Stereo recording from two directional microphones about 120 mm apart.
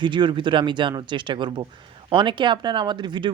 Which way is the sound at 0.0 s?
40° right (ahead or behind).